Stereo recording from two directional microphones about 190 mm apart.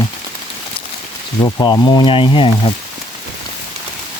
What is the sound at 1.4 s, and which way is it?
Speech, 20° left (ahead or behind).